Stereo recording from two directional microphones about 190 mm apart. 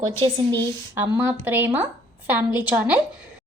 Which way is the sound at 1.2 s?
10° right (ahead or behind).